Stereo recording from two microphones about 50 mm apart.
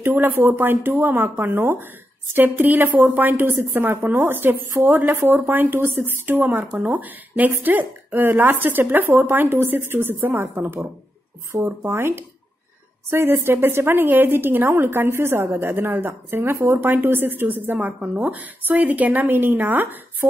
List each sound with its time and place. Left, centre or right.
0.0 s a woman's voice: right
17.7 s a woman's voice: right